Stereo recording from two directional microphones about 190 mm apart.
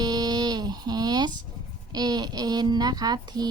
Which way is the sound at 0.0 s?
20° right (ahead or behind).